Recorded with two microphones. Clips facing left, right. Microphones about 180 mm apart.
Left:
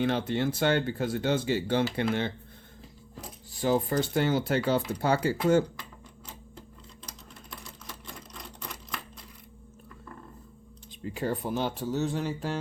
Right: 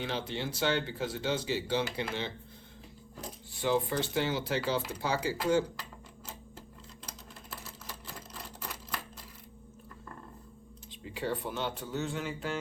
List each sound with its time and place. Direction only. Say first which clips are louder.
0.0 s speech: left 8 dB; 55° left (ahead or behind)
3.5 s speech: left 4 dB; 45° left (ahead or behind)
7.6 s sewing machine: left 1 dB; 5° right (ahead or behind)
11.2 s speech: left 4 dB; 40° left (ahead or behind)